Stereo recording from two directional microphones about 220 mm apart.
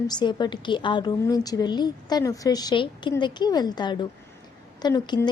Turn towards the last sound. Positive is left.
turn(degrees=15)  # may be behind; listen again after turning